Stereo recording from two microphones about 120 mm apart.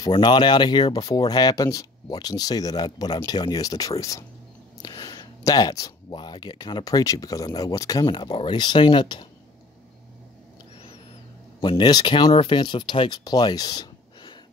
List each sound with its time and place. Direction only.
0.1 s speech: 35° left (ahead or behind)
11.6 s speech: 40° left (ahead or behind)